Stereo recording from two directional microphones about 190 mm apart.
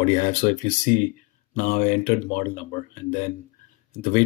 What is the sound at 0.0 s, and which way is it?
Speech, 40° left (ahead or behind).